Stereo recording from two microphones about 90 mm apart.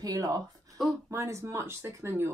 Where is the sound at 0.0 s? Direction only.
40° right (ahead or behind).